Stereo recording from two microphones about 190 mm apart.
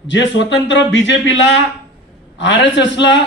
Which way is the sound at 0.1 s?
70° left (ahead or behind).